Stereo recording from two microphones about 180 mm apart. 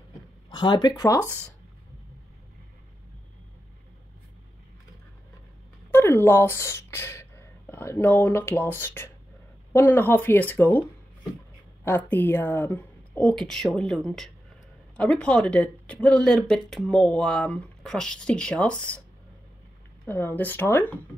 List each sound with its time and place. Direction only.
0.5 s speech: 25° left (ahead or behind)
5.9 s speech: 15° left (ahead or behind)
20.1 s speech: 10° left (ahead or behind)